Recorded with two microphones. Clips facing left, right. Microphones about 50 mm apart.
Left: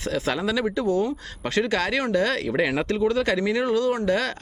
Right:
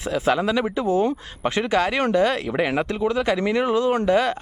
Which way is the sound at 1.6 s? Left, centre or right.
Centre.